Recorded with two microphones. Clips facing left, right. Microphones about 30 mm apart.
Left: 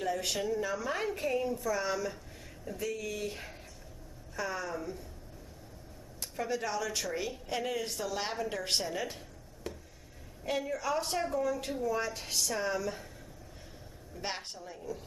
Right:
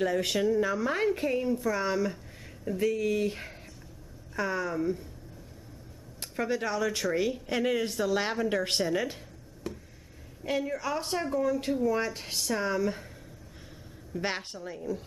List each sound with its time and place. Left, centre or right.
0.0 s a woman's voice: centre
6.3 s speech: right
9.6 s a sound: centre
10.4 s a woman's voice: centre
11.8 s a woman's voice: right
14.1 s speech: right
14.7 s a woman's voice: centre